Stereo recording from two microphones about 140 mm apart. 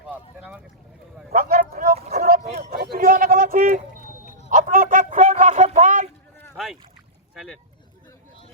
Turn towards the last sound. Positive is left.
turn(degrees=0)  # may be behind; listen again after turning